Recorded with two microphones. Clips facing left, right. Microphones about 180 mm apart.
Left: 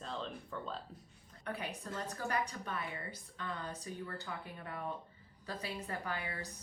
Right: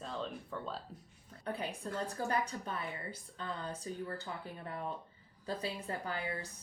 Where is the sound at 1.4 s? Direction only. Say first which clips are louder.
Right 3 dB; 30° right (ahead or behind).